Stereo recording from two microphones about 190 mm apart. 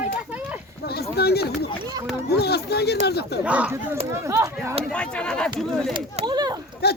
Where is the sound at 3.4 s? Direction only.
5° right (ahead or behind).